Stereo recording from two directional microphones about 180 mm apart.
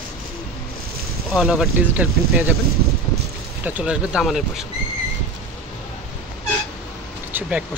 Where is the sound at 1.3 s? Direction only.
Centre (ahead or behind).